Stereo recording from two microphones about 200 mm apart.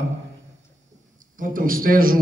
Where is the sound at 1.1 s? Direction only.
40° right (ahead or behind).